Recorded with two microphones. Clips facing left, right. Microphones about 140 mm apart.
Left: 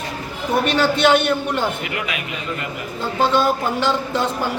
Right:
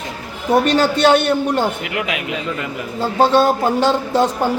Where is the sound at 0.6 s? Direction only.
40° right (ahead or behind).